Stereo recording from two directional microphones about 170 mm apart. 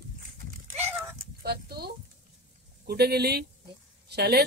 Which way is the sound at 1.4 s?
70° right (ahead or behind).